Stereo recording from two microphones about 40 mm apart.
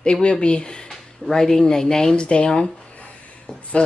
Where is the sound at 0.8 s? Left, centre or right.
Centre.